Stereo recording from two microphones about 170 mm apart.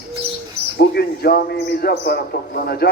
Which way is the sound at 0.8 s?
65° left (ahead or behind).